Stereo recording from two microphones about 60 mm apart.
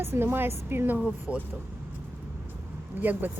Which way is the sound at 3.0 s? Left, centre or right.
Right.